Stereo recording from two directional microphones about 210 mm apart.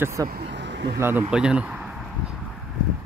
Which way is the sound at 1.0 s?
10° right (ahead or behind).